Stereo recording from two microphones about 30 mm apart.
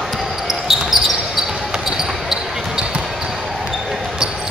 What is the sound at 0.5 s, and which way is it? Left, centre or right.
Basketball bounce, centre.